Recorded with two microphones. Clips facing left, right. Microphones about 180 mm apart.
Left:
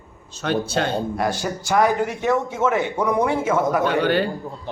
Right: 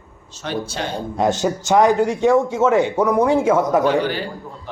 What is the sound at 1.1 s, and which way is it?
Speech, 20° right (ahead or behind).